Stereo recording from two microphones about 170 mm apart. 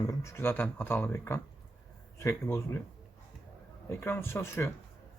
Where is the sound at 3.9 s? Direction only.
15° left (ahead or behind).